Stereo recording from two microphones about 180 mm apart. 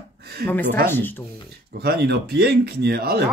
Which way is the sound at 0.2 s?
60° right (ahead or behind).